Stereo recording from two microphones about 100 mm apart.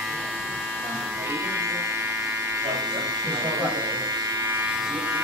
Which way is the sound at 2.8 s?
35° right (ahead or behind).